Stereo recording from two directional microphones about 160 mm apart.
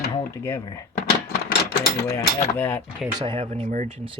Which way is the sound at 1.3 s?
90° left.